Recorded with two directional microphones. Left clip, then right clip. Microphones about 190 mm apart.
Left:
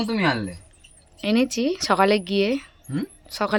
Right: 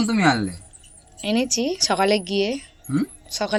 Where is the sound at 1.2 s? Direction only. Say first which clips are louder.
Even; 25° left (ahead or behind).